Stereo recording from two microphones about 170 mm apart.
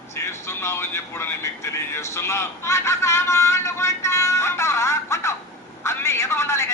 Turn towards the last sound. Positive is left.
turn(degrees=15)  # may be behind; listen again after turning